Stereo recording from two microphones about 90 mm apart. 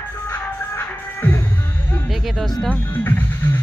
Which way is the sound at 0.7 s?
25° left (ahead or behind).